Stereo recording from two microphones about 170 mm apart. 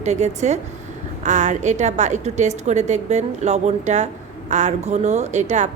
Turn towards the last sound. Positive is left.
turn(degrees=-45)  # may be behind; listen again after turning